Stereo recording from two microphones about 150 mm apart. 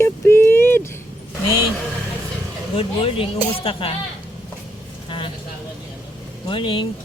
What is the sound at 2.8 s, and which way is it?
Speech, 40° left (ahead or behind).